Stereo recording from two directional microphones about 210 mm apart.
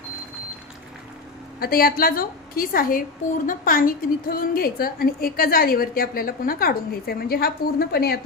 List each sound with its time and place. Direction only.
1.5 s a woman's voice: 45° left (ahead or behind)